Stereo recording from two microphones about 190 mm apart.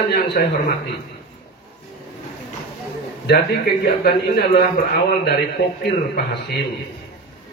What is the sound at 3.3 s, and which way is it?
Speech, 60° left (ahead or behind).